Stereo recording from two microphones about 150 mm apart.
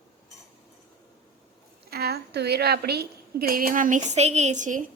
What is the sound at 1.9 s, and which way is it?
A woman's voice, 90° right.